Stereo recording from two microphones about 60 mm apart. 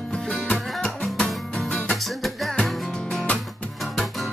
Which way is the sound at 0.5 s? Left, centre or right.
Centre.